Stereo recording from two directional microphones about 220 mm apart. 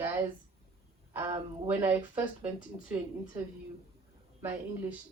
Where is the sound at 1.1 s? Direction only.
10° right (ahead or behind).